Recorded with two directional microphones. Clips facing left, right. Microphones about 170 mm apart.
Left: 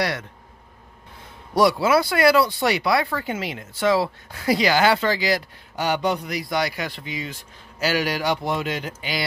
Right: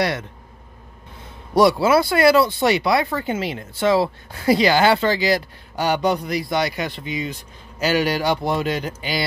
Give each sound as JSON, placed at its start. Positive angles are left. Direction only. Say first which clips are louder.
{"t": 1.5, "sound": "speech", "louder": "right 3 dB", "side_deg": -25}